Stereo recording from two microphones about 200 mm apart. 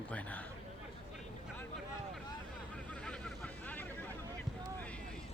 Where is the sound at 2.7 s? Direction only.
5° left (ahead or behind).